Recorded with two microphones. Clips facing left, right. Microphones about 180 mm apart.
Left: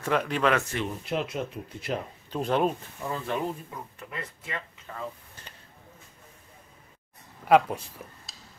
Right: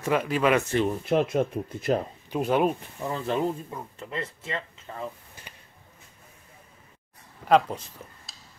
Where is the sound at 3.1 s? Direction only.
25° right (ahead or behind).